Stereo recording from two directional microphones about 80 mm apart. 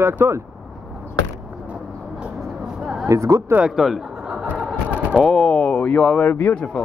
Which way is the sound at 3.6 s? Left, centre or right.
Centre.